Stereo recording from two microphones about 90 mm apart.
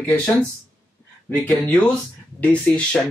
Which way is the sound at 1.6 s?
10° left (ahead or behind).